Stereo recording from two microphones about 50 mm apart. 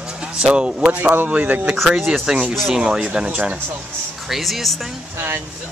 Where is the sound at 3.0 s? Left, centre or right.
Right.